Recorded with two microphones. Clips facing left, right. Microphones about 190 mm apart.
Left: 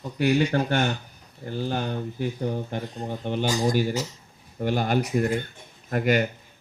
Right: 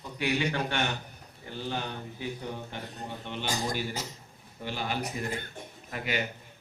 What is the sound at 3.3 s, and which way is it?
A man's voice, 45° left (ahead or behind).